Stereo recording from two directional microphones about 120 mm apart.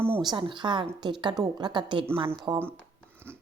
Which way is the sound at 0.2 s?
40° right (ahead or behind).